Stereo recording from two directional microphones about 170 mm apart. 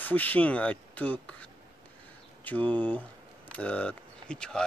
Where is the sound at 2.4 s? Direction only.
10° left (ahead or behind).